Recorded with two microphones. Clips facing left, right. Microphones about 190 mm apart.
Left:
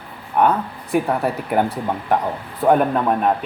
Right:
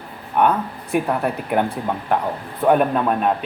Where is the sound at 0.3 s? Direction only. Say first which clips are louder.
Left 1 dB; centre (ahead or behind).